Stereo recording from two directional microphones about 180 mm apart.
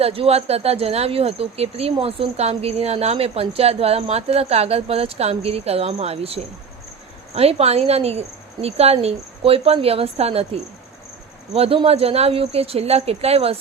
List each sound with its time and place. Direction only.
0.0 s speech: 30° right (ahead or behind)